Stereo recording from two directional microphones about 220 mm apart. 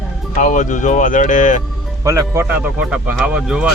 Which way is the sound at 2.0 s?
15° right (ahead or behind).